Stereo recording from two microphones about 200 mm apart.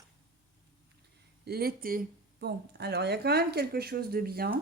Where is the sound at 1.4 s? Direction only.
50° right (ahead or behind).